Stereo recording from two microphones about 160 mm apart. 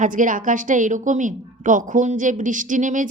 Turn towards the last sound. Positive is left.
turn(degrees=-50)  # may be behind; listen again after turning